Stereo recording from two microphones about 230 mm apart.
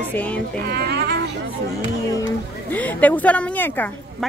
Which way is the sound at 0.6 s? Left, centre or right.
Right.